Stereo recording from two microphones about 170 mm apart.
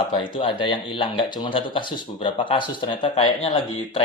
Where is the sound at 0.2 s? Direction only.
30° left (ahead or behind).